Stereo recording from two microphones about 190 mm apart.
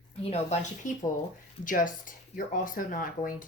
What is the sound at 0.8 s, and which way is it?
Speech, 40° left (ahead or behind).